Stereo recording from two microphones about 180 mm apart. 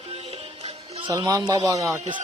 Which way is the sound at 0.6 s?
30° right (ahead or behind).